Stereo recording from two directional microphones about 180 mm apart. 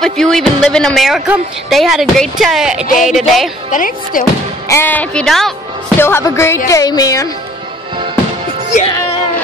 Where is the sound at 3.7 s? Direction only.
50° left (ahead or behind).